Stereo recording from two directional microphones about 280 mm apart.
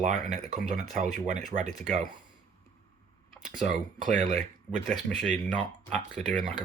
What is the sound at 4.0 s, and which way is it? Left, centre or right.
Speech, right.